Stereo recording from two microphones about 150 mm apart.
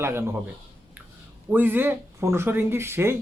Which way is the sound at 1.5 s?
15° right (ahead or behind).